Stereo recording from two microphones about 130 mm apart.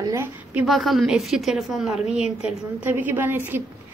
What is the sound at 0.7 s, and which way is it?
A woman's voice, centre (ahead or behind).